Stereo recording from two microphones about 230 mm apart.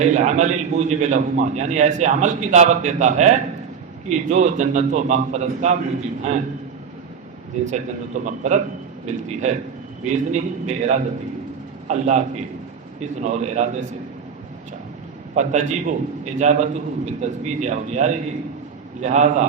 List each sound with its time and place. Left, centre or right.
0.0 s a man's voice: right
7.6 s a man's voice: right
15.4 s a man's voice: right